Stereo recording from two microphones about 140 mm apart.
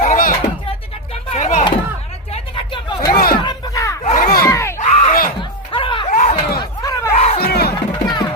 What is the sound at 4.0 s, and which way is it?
Battle cry, 60° left (ahead or behind).